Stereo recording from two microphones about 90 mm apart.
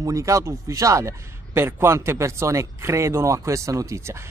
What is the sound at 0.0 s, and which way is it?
Speech, 35° right (ahead or behind).